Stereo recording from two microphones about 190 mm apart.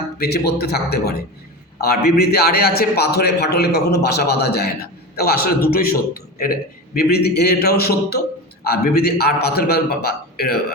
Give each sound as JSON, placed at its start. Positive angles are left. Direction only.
{"t": 0.2, "sound": "a man's voice", "side_deg": 55}